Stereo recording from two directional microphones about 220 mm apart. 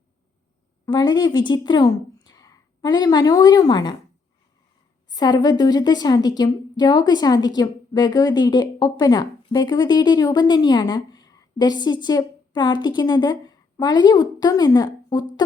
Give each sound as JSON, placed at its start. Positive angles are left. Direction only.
{"t": 0.9, "sound": "speech", "side_deg": 20}
{"t": 5.1, "sound": "a woman's voice", "side_deg": 20}